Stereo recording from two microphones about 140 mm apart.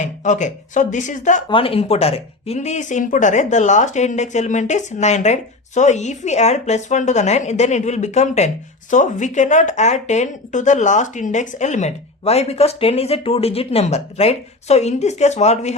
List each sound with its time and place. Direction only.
0.0 s speech: 60° left (ahead or behind)
1.5 s speech: 40° left (ahead or behind)